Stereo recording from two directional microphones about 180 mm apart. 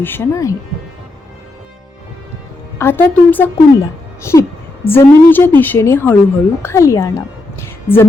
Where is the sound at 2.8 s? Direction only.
10° left (ahead or behind).